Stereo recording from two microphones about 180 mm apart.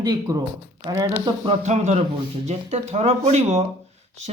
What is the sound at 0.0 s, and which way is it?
Speech, 20° right (ahead or behind).